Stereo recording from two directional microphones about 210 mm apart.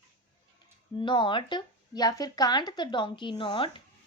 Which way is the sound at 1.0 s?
20° left (ahead or behind).